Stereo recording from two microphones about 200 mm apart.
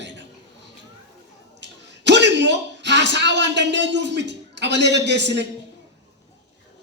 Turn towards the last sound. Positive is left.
turn(degrees=-60)  # may be behind; listen again after turning